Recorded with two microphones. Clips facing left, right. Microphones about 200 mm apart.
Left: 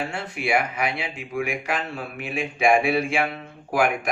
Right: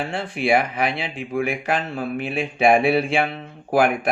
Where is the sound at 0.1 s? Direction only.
30° right (ahead or behind).